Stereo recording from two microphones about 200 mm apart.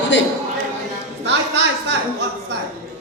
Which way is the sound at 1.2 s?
60° right (ahead or behind).